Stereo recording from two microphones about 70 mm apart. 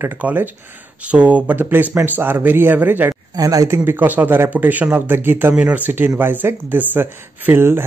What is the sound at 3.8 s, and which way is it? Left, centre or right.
Speech, right.